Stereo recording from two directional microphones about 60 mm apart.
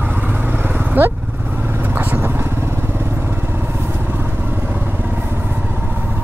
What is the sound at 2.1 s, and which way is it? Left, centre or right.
Vehicle, right.